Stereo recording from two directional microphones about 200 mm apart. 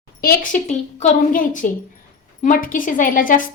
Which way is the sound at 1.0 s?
40° left (ahead or behind).